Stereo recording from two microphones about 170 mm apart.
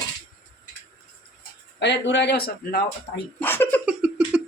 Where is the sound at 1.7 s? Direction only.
90° left; by 3.2 s 60° left (ahead or behind).